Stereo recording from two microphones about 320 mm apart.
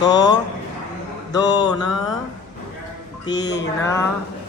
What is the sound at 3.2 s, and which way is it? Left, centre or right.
Speech, centre.